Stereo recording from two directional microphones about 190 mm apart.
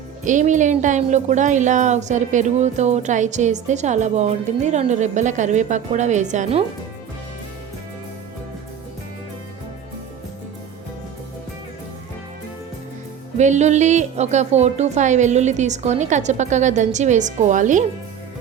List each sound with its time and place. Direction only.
0.3 s a woman's voice: 40° right (ahead or behind)
13.3 s a woman's voice: 40° right (ahead or behind)